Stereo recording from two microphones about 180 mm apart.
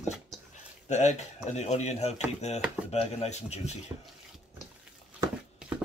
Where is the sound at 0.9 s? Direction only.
40° left (ahead or behind).